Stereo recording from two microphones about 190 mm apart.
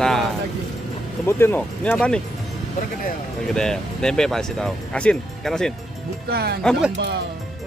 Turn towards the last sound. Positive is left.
turn(degrees=5)  # may be behind; listen again after turning